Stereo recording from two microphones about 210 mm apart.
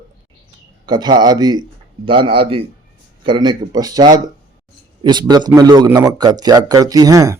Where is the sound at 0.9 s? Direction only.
20° right (ahead or behind).